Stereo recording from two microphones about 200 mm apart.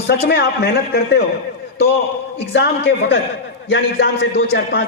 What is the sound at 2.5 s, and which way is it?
A man's voice, 60° left (ahead or behind).